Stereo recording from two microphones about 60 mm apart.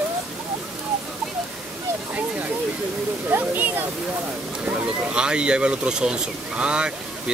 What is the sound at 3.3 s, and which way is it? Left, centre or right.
Speech, right.